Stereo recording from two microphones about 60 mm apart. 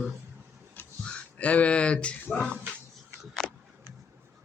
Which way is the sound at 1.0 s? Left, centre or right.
Left.